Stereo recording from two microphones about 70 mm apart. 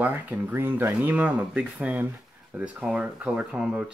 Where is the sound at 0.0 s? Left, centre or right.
Right.